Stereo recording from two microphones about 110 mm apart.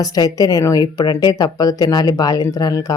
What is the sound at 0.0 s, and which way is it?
Speech, 35° left (ahead or behind).